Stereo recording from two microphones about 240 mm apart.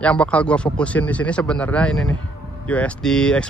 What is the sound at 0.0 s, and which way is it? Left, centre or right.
A man's voice, centre.